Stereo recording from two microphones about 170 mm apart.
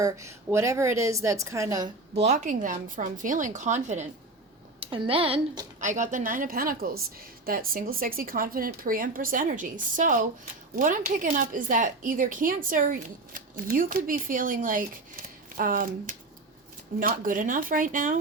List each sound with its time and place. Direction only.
0.0 s a woman's voice: 15° right (ahead or behind)
2.1 s speech: 40° right (ahead or behind)
4.8 s a woman's voice: 30° right (ahead or behind)
5.8 s speech: 45° right (ahead or behind)